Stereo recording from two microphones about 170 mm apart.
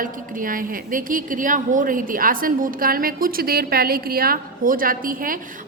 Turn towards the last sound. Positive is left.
turn(degrees=-55)  # may be behind; listen again after turning